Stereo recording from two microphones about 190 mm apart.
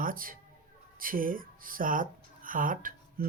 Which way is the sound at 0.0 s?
45° right (ahead or behind).